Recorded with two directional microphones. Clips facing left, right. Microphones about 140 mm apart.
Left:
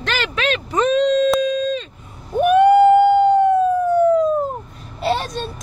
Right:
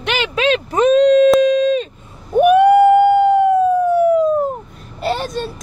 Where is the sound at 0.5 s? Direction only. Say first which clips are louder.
Right 5 dB; 40° right (ahead or behind).